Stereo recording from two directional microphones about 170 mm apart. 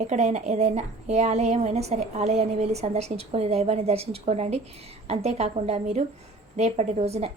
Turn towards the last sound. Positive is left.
turn(degrees=-40)  # may be behind; listen again after turning